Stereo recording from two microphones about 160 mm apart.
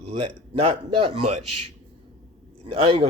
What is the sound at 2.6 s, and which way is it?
Speech, 35° right (ahead or behind).